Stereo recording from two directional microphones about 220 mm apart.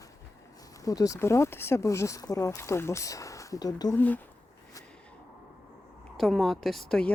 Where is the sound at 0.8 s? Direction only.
15° left (ahead or behind).